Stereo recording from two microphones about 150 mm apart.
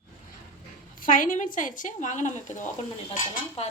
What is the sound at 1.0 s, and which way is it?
A woman's voice, 65° left (ahead or behind).